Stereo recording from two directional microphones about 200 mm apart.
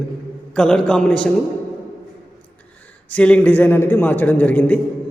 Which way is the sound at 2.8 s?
5° left (ahead or behind).